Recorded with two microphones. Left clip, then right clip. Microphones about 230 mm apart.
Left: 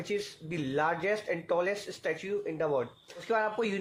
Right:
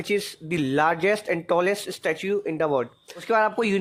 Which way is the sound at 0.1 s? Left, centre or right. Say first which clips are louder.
Right 9 dB; right.